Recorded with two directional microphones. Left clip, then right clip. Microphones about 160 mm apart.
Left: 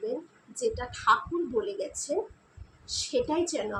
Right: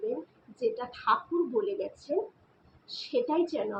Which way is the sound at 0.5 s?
5° left (ahead or behind).